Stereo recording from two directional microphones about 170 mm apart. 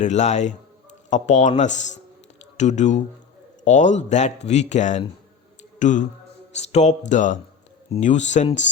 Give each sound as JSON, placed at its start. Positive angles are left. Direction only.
{"t": 0.0, "sound": "a man's voice", "side_deg": 45}